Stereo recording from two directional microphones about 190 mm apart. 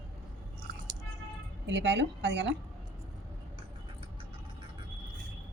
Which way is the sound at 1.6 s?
65° right (ahead or behind).